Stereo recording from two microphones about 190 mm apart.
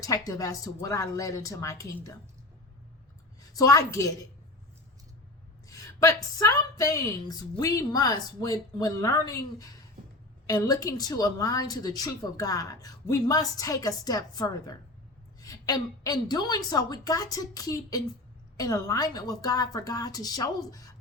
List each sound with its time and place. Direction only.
0.0 s speech: 20° left (ahead or behind)
3.5 s speech: 20° left (ahead or behind)
5.6 s a woman's voice: 15° left (ahead or behind)